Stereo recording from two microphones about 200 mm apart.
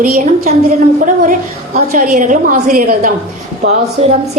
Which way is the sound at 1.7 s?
40° right (ahead or behind).